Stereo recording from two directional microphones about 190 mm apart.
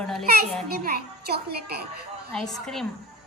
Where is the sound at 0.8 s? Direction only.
55° right (ahead or behind).